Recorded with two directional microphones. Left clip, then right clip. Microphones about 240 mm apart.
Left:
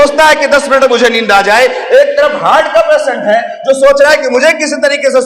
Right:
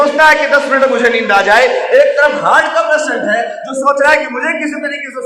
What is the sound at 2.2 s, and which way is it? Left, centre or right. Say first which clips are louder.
A man's voice: left 2 dB; left.